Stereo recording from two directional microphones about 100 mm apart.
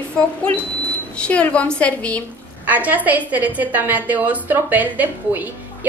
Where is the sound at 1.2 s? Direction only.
10° left (ahead or behind).